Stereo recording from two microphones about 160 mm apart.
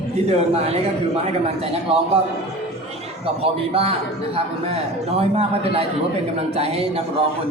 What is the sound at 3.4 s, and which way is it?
Speech, 40° right (ahead or behind).